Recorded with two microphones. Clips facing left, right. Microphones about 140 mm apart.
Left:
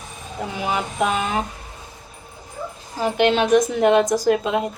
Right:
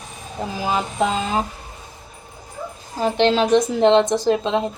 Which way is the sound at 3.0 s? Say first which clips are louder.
Right 1 dB; 30° right (ahead or behind).